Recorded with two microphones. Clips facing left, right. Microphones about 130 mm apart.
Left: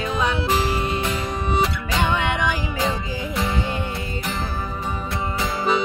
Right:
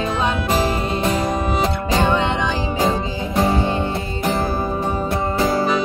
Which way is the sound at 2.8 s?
45° right (ahead or behind).